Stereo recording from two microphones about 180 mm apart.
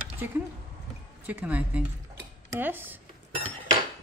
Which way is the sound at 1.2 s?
10° right (ahead or behind).